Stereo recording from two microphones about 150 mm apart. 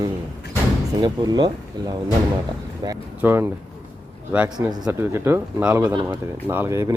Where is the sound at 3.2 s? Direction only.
15° right (ahead or behind).